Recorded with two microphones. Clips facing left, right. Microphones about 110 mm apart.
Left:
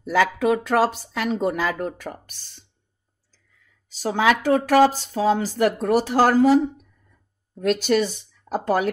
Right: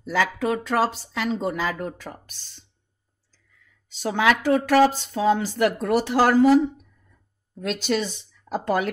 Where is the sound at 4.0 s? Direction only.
35° left (ahead or behind).